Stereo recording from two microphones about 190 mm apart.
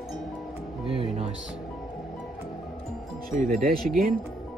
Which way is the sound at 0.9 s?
30° right (ahead or behind).